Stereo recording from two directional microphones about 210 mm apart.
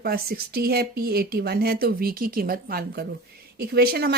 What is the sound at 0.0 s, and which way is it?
A woman's voice, 45° right (ahead or behind).